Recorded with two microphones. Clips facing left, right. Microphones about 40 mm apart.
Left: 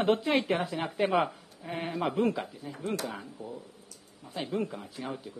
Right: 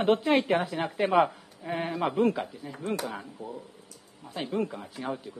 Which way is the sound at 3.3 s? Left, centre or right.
Centre.